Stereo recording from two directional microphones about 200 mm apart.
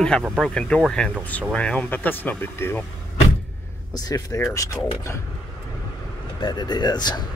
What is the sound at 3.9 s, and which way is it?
Speech, 20° left (ahead or behind).